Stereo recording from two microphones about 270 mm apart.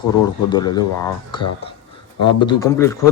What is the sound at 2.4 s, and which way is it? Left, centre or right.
Speech, centre.